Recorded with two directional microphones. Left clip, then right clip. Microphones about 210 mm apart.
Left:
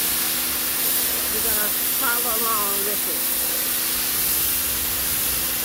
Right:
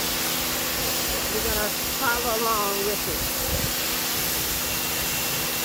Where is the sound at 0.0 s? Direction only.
5° left (ahead or behind).